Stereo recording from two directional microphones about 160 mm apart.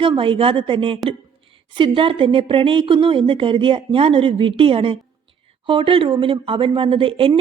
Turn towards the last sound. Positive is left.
turn(degrees=-35)  # may be behind; listen again after turning